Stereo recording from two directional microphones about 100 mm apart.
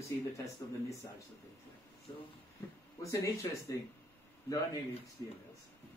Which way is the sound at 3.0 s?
30° left (ahead or behind).